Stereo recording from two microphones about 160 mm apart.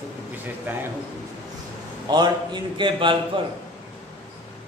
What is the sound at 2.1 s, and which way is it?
A man's voice, 25° right (ahead or behind).